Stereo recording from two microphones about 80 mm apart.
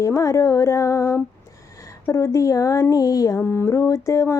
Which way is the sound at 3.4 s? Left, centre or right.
Left.